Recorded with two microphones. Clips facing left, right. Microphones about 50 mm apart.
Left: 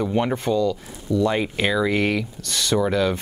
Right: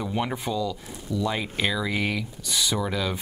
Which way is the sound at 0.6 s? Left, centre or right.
Left.